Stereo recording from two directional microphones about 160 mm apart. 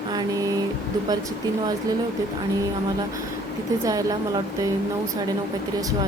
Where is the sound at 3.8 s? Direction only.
20° right (ahead or behind).